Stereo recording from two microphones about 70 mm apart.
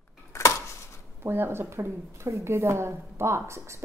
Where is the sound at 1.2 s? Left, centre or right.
Right.